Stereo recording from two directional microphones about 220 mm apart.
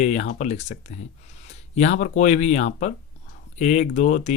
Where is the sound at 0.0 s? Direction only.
30° left (ahead or behind).